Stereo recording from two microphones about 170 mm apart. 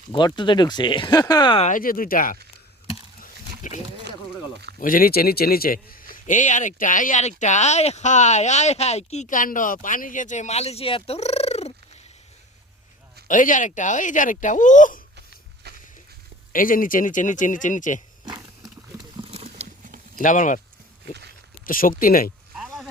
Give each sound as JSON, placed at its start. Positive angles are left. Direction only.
{"t": 0.1, "sound": "speech", "side_deg": 25}
{"t": 1.6, "sound": "a man's voice", "side_deg": 55}
{"t": 3.2, "sound": "wild animals", "side_deg": 45}
{"t": 4.8, "sound": "a man's voice", "side_deg": 55}
{"t": 13.2, "sound": "a man's voice", "side_deg": 50}
{"t": 15.6, "sound": "a sound", "side_deg": -75}
{"t": 16.5, "sound": "a man's voice", "side_deg": 55}
{"t": 19.3, "sound": "a sound", "side_deg": -40}
{"t": 20.1, "sound": "a man's voice", "side_deg": 50}
{"t": 21.7, "sound": "speech", "side_deg": 55}
{"t": 22.5, "sound": "a sound", "side_deg": 0}